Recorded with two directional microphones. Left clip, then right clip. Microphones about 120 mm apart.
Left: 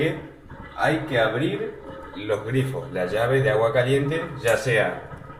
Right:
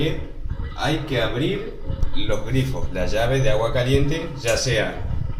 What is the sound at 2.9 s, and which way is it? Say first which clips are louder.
Speech: even; 35° left (ahead or behind).